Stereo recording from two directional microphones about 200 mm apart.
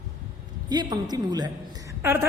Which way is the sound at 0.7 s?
20° right (ahead or behind).